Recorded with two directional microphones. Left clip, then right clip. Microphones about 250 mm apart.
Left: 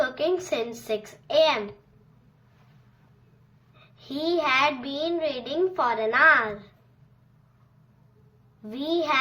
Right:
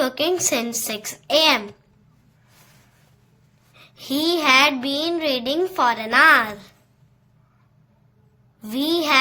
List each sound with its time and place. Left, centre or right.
0.0 s a child's voice: right
3.8 s a child's voice: right
8.7 s a child's voice: right